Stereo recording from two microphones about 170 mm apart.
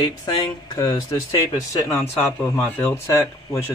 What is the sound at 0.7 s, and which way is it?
Speech, 20° left (ahead or behind).